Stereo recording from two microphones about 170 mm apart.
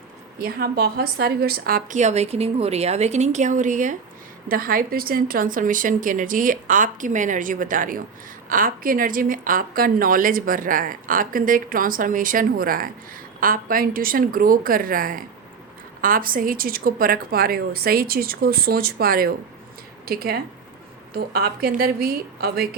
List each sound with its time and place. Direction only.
0.3 s a woman's voice: 65° right (ahead or behind)